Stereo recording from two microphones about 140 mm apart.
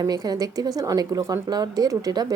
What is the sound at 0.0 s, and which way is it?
A woman's voice, 25° right (ahead or behind).